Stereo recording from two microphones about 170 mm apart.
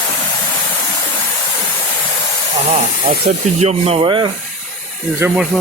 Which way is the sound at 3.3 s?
45° right (ahead or behind).